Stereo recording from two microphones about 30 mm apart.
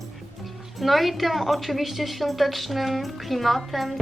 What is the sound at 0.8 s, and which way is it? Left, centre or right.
Speech, centre.